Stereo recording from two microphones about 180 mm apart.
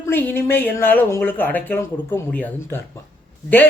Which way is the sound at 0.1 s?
10° left (ahead or behind).